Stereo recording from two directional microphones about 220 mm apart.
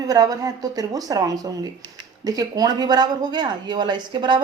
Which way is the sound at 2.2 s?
15° right (ahead or behind).